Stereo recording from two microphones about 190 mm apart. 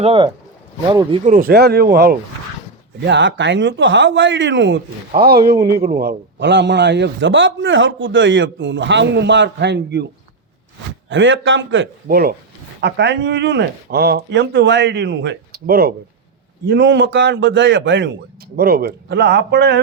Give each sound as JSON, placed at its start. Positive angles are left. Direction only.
{"t": 0.0, "sound": "speech", "side_deg": -30}
{"t": 1.2, "sound": "speech", "side_deg": -45}
{"t": 3.0, "sound": "a man's voice", "side_deg": -70}
{"t": 5.1, "sound": "a man's voice", "side_deg": -55}
{"t": 11.1, "sound": "a man's voice", "side_deg": -85}
{"t": 12.0, "sound": "speech", "side_deg": -50}
{"t": 12.8, "sound": "speech", "side_deg": -65}
{"t": 16.6, "sound": "a man's voice", "side_deg": -70}
{"t": 18.5, "sound": "speech", "side_deg": -55}